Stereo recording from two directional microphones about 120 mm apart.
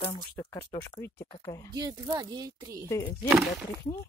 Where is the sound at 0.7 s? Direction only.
25° left (ahead or behind).